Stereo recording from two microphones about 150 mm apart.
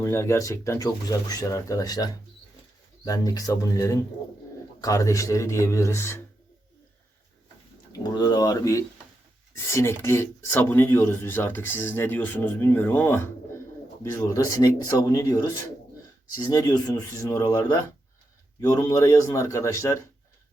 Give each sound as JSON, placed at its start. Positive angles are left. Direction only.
{"t": 0.0, "sound": "speech", "side_deg": 15}
{"t": 8.1, "sound": "speech", "side_deg": 25}